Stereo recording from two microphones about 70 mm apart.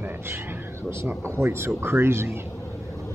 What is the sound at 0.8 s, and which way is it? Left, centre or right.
Speech, right.